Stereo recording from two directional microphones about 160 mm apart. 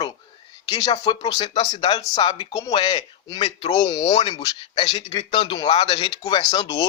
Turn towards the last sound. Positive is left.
turn(degrees=20)  # may be behind; listen again after turning